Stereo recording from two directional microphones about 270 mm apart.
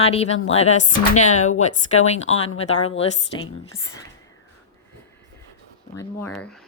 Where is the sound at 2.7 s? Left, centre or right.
Left.